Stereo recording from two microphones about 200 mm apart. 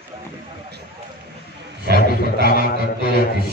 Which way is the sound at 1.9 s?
50° left (ahead or behind).